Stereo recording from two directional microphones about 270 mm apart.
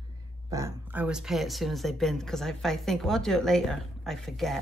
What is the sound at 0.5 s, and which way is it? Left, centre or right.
Speech, centre.